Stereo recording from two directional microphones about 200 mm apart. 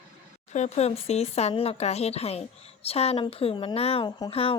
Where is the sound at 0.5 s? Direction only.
35° left (ahead or behind).